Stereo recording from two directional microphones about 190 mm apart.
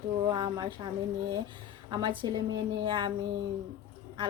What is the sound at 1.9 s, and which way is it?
Speech, 25° right (ahead or behind).